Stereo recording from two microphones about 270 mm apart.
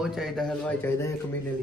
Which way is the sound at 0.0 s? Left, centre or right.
Centre.